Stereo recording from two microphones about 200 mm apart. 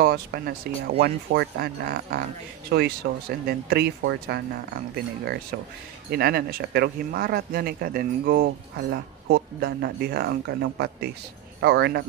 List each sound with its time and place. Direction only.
0.0 s speech: 50° right (ahead or behind)